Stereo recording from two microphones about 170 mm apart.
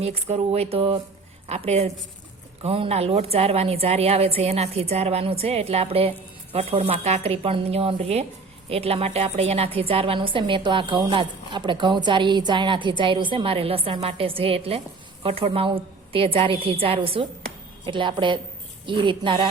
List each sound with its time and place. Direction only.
0.0 s a woman's voice: 35° right (ahead or behind)